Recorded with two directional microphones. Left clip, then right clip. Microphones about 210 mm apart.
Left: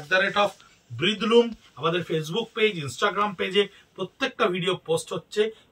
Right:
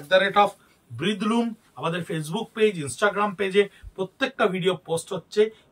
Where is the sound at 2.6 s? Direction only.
20° right (ahead or behind).